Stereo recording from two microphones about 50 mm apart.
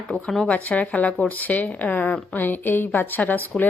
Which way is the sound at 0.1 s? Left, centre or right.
Centre.